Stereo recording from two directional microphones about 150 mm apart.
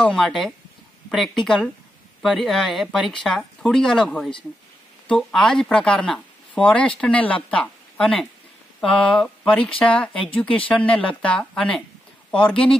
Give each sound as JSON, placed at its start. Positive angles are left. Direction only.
{"t": 0.0, "sound": "speech", "side_deg": 5}